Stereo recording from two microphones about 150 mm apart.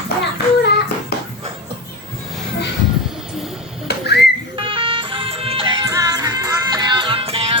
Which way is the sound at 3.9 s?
90° left.